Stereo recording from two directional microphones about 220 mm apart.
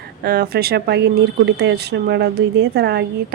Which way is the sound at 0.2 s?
45° right (ahead or behind).